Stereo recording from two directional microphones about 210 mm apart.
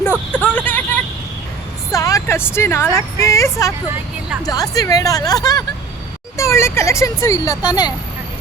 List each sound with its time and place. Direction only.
0.3 s vehicle: 5° left (ahead or behind)
1.9 s a woman's voice: 15° left (ahead or behind)